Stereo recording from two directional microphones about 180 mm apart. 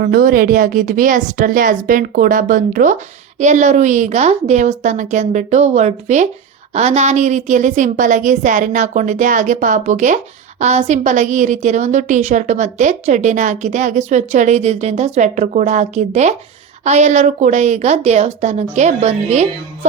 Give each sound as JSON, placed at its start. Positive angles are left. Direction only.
{"t": 0.0, "sound": "a woman's voice", "side_deg": -50}